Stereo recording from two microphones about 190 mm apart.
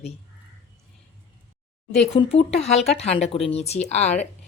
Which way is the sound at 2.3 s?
35° left (ahead or behind).